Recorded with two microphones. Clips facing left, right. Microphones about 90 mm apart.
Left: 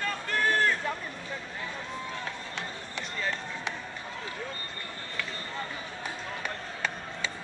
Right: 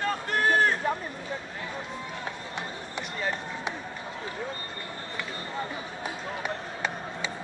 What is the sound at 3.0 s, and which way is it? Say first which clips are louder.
Run: right 2 dB; 15° right (ahead or behind).